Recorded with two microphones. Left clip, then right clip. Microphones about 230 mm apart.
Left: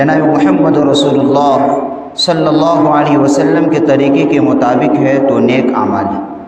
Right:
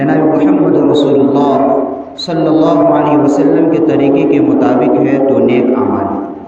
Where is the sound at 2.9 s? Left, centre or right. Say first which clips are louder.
Even; left.